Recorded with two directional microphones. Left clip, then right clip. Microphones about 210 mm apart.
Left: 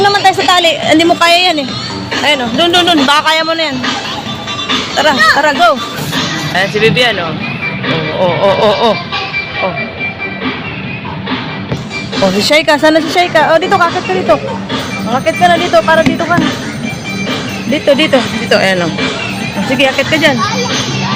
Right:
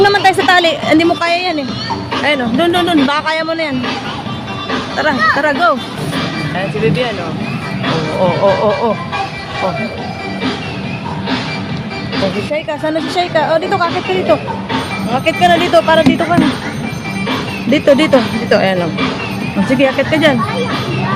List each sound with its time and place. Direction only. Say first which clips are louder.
0.0 s a sound: left 1 dB; 25° right (ahead or behind)
0.9 s speech: left 4 dB; centre (ahead or behind)
2.2 s speech: left 3 dB; 10° right (ahead or behind)
4.9 s speech: left 4 dB; 5° right (ahead or behind)
6.6 s speech: left 7 dB; 5° left (ahead or behind)
8.2 s speech: left 2 dB; centre (ahead or behind)
12.5 s a woman's voice: left 10 dB; 35° left (ahead or behind)
15.1 s speech: left 2 dB; 5° left (ahead or behind)
17.7 s speech: even; 15° right (ahead or behind)